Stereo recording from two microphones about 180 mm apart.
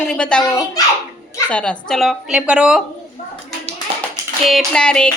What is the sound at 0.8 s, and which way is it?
Speech, 20° left (ahead or behind).